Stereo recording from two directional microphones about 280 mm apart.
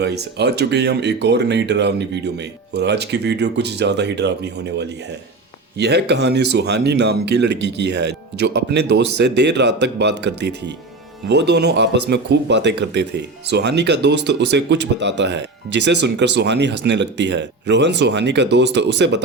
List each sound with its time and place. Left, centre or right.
0.0 s speech: right
5.7 s speech: right
15.2 s speech: right